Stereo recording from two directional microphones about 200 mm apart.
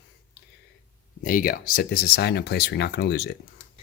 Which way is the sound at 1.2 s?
45° left (ahead or behind).